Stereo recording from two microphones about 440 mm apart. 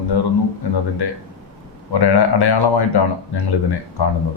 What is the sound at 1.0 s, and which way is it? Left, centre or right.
Speech, left.